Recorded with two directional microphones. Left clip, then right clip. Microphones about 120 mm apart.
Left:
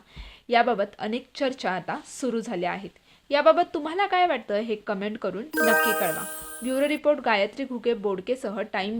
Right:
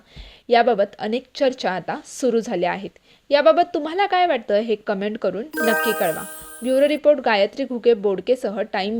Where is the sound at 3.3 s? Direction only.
30° right (ahead or behind).